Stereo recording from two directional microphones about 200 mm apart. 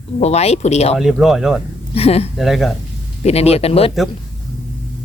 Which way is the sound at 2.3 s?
Centre (ahead or behind).